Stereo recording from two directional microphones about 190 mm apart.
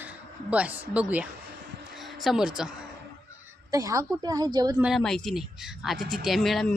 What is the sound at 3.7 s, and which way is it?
A woman's voice, 20° right (ahead or behind).